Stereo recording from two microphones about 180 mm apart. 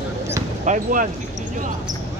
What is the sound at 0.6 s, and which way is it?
Basketball bounce, 45° right (ahead or behind).